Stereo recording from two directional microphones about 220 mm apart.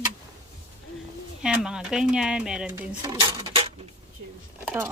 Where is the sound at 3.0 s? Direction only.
20° right (ahead or behind).